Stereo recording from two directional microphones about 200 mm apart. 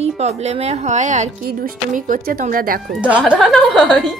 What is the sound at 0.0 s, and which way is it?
Speech, 35° right (ahead or behind).